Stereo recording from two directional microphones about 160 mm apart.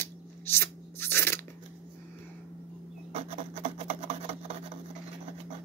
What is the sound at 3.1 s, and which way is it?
Filing, 40° right (ahead or behind).